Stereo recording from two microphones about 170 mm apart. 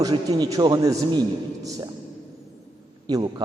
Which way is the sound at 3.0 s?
25° right (ahead or behind).